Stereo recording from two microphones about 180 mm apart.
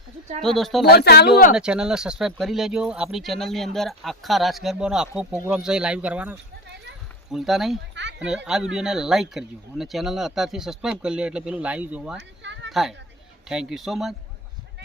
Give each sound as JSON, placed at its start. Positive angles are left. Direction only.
{"t": 0.4, "sound": "speech", "side_deg": 0}
{"t": 0.9, "sound": "speech", "side_deg": 60}
{"t": 1.5, "sound": "speech", "side_deg": -5}
{"t": 12.4, "sound": "a sound", "side_deg": -85}
{"t": 12.7, "sound": "speech", "side_deg": 0}